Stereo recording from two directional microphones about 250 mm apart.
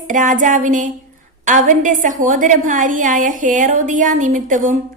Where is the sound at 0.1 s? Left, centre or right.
Right.